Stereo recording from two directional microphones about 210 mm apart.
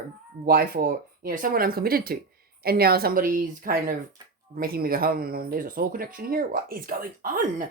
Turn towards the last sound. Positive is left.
turn(degrees=-40)  # may be behind; listen again after turning